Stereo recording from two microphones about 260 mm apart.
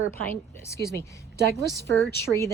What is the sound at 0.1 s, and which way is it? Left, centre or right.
Speech, centre.